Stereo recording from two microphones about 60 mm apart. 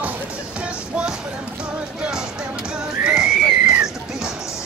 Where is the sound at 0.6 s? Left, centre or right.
Centre.